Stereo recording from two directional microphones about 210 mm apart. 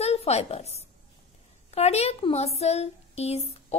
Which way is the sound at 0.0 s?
30° left (ahead or behind).